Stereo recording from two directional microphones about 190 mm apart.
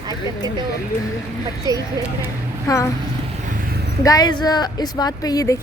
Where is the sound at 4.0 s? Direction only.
20° left (ahead or behind).